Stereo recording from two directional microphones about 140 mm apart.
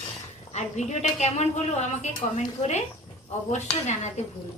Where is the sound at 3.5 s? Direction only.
55° left (ahead or behind).